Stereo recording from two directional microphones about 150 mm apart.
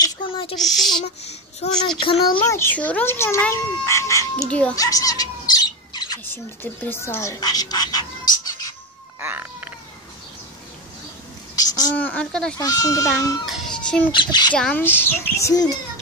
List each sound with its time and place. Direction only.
0.0 s a sound: 35° left (ahead or behind)
0.6 s a woman's voice: centre (ahead or behind)
1.0 s a child's voice: 45° left (ahead or behind)
2.4 s speech: 15° left (ahead or behind)
4.5 s speech: 10° left (ahead or behind)
4.7 s bird: 25° left (ahead or behind)
6.2 s speech: 15° left (ahead or behind)
9.2 s a sound: 15° right (ahead or behind)
11.5 s a sound: 25° left (ahead or behind)
12.0 s a woman's voice: 10° left (ahead or behind)
12.5 s speech: 25° left (ahead or behind)
13.5 s a sound: centre (ahead or behind)
14.1 s speech: 30° left (ahead or behind)
14.5 s speech: 10° left (ahead or behind)